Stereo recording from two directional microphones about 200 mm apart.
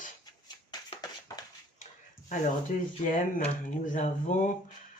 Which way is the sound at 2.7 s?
40° left (ahead or behind).